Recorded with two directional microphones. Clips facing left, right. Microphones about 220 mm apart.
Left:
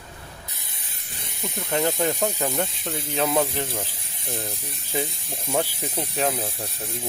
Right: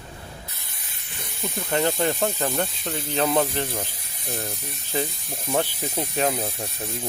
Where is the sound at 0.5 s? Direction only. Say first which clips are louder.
Left 1 dB; 20° left (ahead or behind).